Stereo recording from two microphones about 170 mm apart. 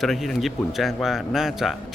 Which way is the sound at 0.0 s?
Centre (ahead or behind).